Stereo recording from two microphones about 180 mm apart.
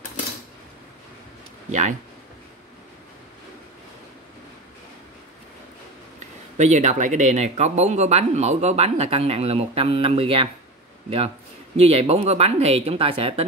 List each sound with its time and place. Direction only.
1.7 s speech: 40° right (ahead or behind)
6.1 s speech: 40° right (ahead or behind)